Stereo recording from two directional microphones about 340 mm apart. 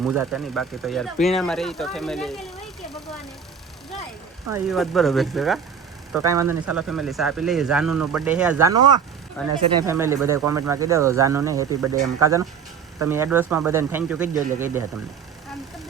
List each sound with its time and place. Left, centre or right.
0.0 s speech: centre
4.4 s speech: centre
9.4 s speech: centre